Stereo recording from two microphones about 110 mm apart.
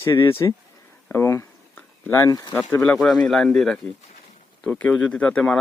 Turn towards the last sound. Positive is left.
turn(degrees=5)  # may be behind; listen again after turning